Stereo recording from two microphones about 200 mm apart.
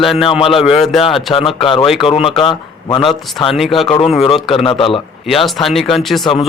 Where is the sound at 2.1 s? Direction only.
30° left (ahead or behind).